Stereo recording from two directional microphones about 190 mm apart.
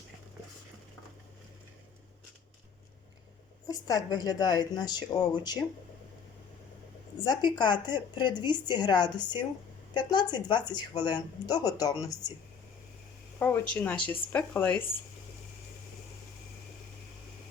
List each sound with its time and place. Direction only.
3.7 s speech: 20° left (ahead or behind)
7.3 s speech: 25° left (ahead or behind)
13.7 s speech: 10° left (ahead or behind)